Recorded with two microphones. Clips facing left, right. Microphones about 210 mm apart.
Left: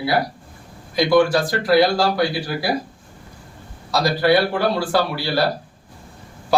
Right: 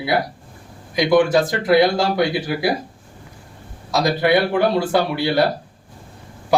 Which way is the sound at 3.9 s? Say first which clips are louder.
Even; 20° right (ahead or behind).